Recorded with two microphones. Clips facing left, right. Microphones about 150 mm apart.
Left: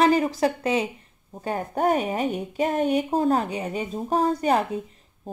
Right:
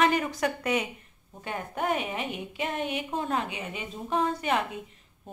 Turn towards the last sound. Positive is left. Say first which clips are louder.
# left 6 dB
turn(degrees=40)  # may be behind; listen again after turning